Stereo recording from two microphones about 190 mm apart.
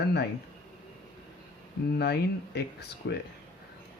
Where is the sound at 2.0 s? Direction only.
60° left (ahead or behind).